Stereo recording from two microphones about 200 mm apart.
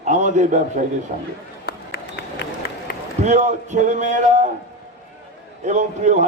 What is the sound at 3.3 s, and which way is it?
Speech, 35° right (ahead or behind).